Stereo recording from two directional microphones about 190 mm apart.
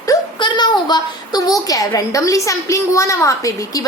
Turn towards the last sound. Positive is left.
turn(degrees=15)  # may be behind; listen again after turning